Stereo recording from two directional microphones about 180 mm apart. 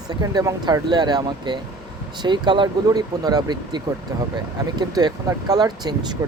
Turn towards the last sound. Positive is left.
turn(degrees=-25)  # may be behind; listen again after turning